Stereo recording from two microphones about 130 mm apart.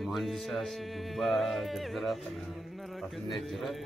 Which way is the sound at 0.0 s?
Centre (ahead or behind).